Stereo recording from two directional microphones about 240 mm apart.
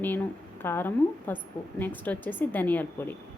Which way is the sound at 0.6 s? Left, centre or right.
Centre.